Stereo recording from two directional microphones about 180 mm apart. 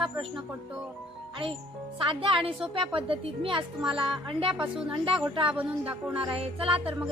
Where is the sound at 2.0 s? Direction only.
30° right (ahead or behind).